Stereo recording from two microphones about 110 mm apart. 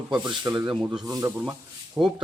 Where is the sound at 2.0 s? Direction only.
20° right (ahead or behind).